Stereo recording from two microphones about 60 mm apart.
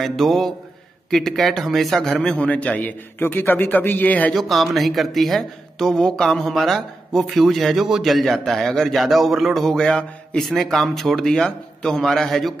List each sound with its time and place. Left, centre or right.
0.0 s speech: centre
2.3 s a man's voice: left
4.3 s speech: centre
9.8 s speech: centre